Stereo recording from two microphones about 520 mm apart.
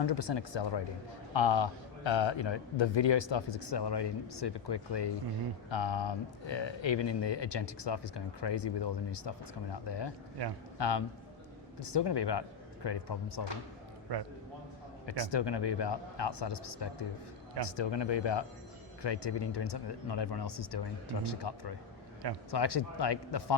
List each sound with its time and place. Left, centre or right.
0.0 s a man's voice: left
15.0 s speech: left